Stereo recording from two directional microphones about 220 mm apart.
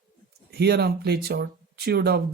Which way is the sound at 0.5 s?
50° right (ahead or behind).